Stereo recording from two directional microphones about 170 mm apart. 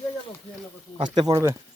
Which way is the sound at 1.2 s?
20° right (ahead or behind).